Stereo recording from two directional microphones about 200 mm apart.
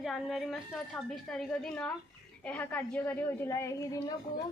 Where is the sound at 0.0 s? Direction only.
Centre (ahead or behind).